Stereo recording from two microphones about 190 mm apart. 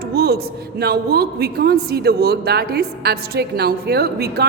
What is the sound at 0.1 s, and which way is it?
A woman's voice, 55° right (ahead or behind).